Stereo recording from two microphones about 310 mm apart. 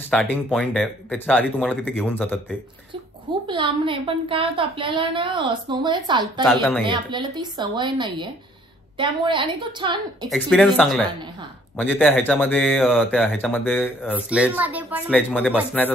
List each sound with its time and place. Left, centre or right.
0.1 s speech: centre
3.4 s a woman's voice: centre
6.4 s speech: centre
6.8 s a woman's voice: centre
10.3 s speech: centre